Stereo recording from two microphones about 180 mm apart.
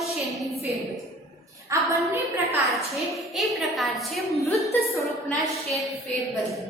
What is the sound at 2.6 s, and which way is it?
A woman's voice, centre (ahead or behind).